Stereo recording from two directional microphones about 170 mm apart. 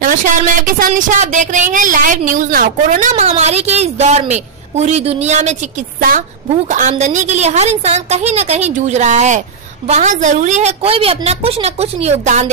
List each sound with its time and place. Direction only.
0.0 s a woman's voice: 55° right (ahead or behind)